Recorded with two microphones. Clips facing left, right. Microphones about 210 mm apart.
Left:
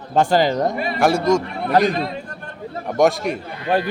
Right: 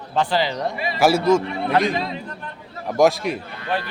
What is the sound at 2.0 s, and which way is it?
Chatter, 50° left (ahead or behind).